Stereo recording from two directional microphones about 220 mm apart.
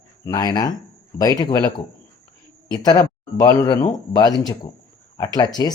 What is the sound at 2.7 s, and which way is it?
Speech, 20° left (ahead or behind).